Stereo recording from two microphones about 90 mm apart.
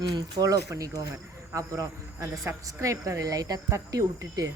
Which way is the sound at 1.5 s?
35° right (ahead or behind).